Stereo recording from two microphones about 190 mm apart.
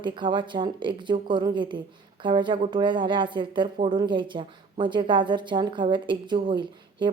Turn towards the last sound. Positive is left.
turn(degrees=-25)  # may be behind; listen again after turning